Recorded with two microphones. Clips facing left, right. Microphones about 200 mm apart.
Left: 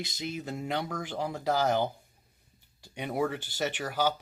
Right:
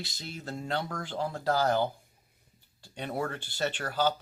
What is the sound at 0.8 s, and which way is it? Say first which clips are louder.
Speech: even; 5° left (ahead or behind).